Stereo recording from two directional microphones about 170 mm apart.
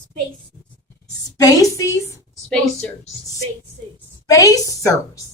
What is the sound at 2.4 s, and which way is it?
Speech, 5° left (ahead or behind).